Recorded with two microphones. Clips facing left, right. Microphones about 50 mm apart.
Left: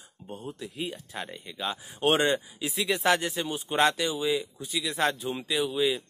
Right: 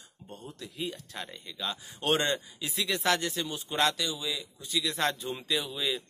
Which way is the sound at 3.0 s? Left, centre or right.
Centre.